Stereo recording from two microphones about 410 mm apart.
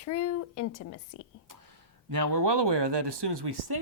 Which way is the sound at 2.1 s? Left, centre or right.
Right.